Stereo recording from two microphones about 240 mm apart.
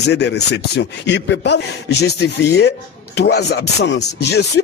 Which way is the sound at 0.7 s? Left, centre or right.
Left.